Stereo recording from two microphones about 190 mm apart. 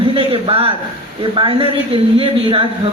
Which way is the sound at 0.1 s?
30° right (ahead or behind).